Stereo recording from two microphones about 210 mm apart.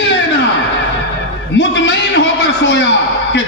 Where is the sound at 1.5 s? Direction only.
60° left (ahead or behind).